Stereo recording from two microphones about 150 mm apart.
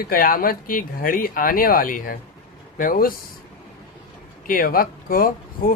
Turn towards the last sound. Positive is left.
turn(degrees=70)  # may be behind; listen again after turning